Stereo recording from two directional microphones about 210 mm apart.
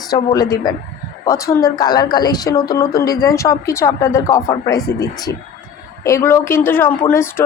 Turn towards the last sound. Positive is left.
turn(degrees=10)  # may be behind; listen again after turning